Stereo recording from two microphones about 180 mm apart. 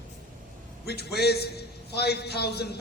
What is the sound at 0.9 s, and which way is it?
A man's voice, 65° left (ahead or behind).